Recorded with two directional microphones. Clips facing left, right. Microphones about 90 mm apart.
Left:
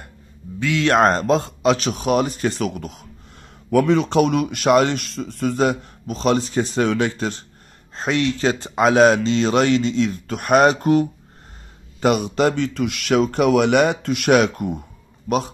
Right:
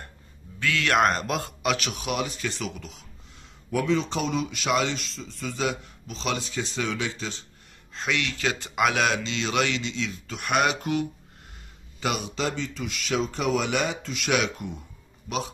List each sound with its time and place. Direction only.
0.6 s speech: 20° left (ahead or behind); by 3.1 s 50° left (ahead or behind)
3.7 s speech: 65° left (ahead or behind)
7.9 s speech: 40° left (ahead or behind)